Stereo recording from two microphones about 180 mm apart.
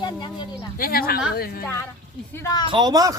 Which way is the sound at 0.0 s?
25° left (ahead or behind).